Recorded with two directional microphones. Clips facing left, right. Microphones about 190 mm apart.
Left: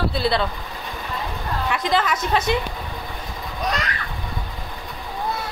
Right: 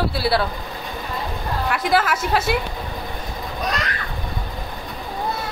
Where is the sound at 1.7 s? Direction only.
5° right (ahead or behind).